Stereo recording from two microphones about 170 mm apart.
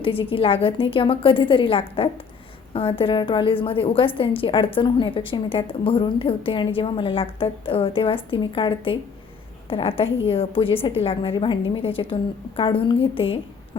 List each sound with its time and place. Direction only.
0.0 s a woman's voice: 35° left (ahead or behind)